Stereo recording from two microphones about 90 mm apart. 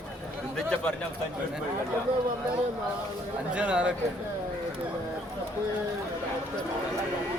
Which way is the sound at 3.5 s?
15° right (ahead or behind).